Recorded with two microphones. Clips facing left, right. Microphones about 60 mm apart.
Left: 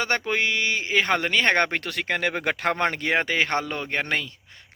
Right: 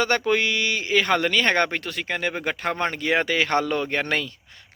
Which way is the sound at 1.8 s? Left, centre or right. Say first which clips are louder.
Left 1 dB; left.